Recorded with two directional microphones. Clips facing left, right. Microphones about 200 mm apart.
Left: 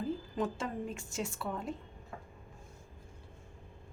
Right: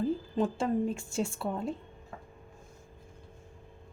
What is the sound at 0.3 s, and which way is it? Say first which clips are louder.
A woman's voice: right 8 dB; 30° right (ahead or behind).